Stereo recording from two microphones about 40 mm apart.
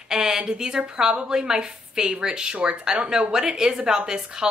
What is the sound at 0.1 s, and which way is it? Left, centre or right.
Speech, centre.